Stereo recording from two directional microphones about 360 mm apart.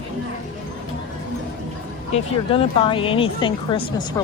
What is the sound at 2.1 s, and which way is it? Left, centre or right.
Speech, centre.